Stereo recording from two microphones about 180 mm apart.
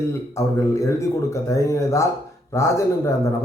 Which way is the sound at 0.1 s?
15° left (ahead or behind).